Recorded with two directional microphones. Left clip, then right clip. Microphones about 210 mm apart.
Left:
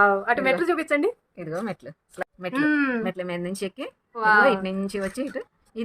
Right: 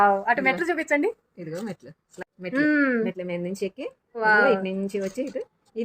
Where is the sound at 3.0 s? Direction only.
45° left (ahead or behind).